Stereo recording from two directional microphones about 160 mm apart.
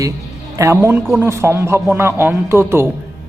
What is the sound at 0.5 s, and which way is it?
A man's voice, 15° right (ahead or behind).